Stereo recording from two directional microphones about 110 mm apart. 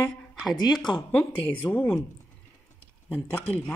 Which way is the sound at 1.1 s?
15° left (ahead or behind).